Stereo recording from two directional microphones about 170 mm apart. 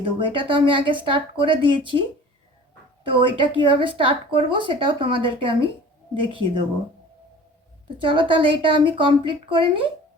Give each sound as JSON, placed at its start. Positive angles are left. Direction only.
{"t": 0.0, "sound": "speech", "side_deg": -30}
{"t": 3.1, "sound": "a woman's voice", "side_deg": -30}
{"t": 7.9, "sound": "speech", "side_deg": -30}